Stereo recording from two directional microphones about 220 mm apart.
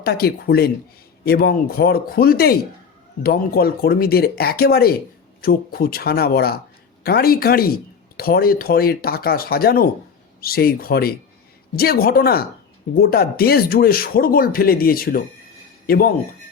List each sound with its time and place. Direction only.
0.0 s speech: 45° left (ahead or behind)